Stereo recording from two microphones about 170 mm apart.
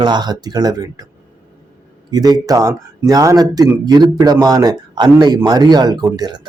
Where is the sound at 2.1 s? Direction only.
25° right (ahead or behind).